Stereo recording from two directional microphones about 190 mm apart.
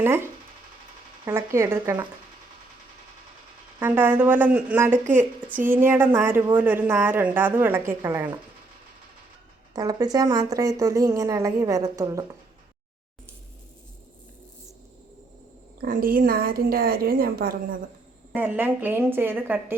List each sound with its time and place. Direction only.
0.0 s a woman's voice: 15° right (ahead or behind)
3.8 s a woman's voice: 10° right (ahead or behind)
9.7 s a woman's voice: 20° right (ahead or behind)
15.8 s a woman's voice: 50° right (ahead or behind)
18.3 s a woman's voice: 10° right (ahead or behind)